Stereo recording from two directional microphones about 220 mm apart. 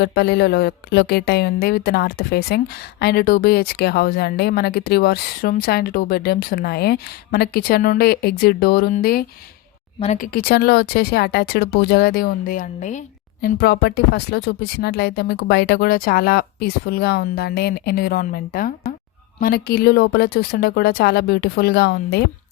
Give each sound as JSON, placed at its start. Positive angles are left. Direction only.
{"t": 0.0, "sound": "speech", "side_deg": 45}
{"t": 13.4, "sound": "speech", "side_deg": 45}